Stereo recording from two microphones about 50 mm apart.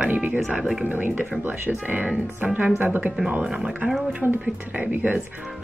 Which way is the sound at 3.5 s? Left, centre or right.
Centre.